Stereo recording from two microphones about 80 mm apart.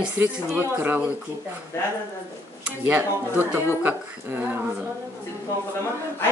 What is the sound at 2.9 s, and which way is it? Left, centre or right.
A woman's voice, right.